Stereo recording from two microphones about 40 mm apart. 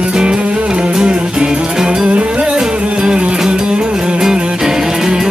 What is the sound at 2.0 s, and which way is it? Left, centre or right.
Music, right.